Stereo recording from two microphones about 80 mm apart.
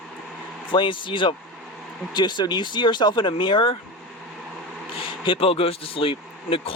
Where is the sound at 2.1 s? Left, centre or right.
Left.